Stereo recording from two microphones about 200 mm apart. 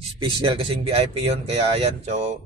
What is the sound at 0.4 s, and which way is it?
Speech, 25° right (ahead or behind).